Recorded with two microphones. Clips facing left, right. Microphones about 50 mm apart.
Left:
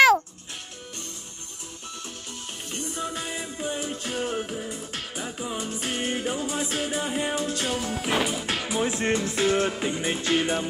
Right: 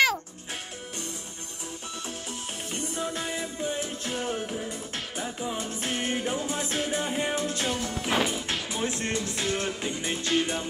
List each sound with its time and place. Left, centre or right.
2.7 s music: centre